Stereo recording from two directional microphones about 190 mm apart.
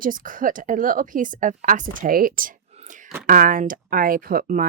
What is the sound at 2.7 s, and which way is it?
Whispering, 40° right (ahead or behind).